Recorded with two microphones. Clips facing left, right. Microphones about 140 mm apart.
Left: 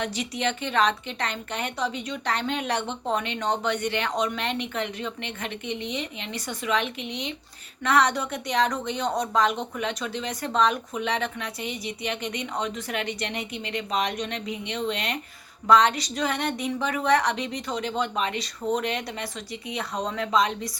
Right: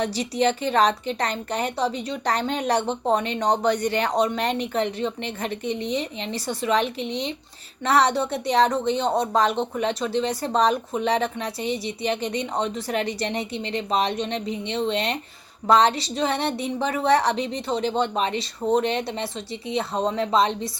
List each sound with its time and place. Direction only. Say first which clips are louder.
0.0 s a woman's voice: right 6 dB; 35° right (ahead or behind)